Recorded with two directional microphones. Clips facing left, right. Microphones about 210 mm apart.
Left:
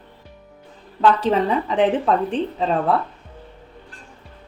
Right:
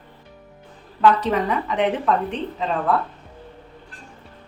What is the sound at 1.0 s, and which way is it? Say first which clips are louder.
Speech: left 1 dB; 30° left (ahead or behind).